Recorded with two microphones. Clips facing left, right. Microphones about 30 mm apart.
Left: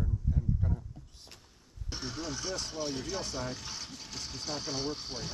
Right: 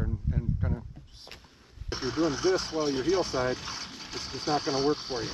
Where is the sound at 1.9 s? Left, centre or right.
Right.